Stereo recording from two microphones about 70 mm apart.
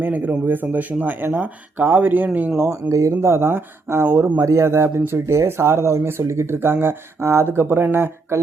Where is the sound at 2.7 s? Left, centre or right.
Right.